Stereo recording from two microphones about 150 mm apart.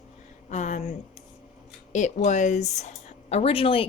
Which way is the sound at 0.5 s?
55° left (ahead or behind).